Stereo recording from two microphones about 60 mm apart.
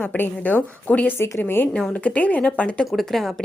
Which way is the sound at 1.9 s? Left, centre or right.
Left.